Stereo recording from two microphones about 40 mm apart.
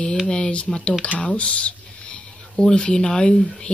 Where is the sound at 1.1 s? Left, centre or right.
Left.